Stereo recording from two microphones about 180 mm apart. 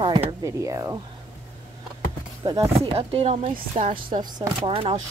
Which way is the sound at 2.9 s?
30° right (ahead or behind).